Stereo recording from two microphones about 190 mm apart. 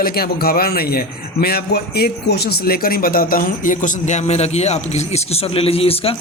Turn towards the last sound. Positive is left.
turn(degrees=30)  # may be behind; listen again after turning